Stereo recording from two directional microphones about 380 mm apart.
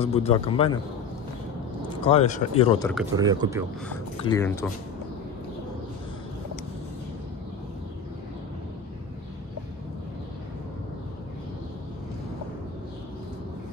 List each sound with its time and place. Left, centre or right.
0.0 s a man's voice: centre
1.8 s speech: centre
2.9 s speech: centre
4.2 s a man's voice: centre